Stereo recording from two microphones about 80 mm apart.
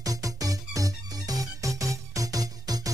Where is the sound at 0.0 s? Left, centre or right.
Right.